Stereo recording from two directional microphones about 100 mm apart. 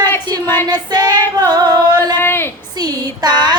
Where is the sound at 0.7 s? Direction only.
45° right (ahead or behind).